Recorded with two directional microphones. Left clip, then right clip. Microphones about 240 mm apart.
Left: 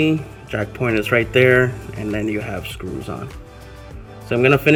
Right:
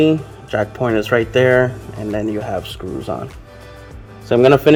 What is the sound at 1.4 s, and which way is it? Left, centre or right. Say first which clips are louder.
Speech: right 1 dB; left.